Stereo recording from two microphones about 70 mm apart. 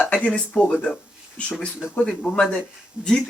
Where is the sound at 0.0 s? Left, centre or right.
Centre.